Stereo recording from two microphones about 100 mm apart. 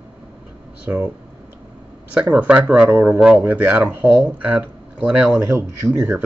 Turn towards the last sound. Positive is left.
turn(degrees=-25)  # may be behind; listen again after turning